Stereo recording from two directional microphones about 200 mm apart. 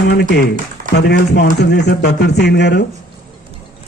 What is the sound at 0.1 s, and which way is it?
Speech, 55° left (ahead or behind).